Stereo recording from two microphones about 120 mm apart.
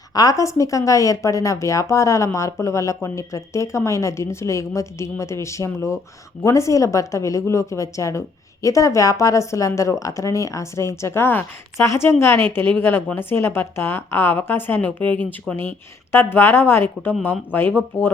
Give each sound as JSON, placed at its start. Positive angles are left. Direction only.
{"t": 0.1, "sound": "a woman's voice", "side_deg": 30}